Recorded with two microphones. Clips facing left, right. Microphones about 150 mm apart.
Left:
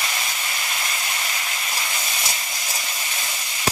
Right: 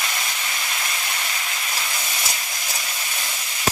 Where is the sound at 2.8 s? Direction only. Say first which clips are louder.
Even; 5° left (ahead or behind).